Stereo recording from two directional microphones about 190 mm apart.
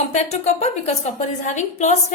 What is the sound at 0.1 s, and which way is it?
A woman's voice, 35° left (ahead or behind).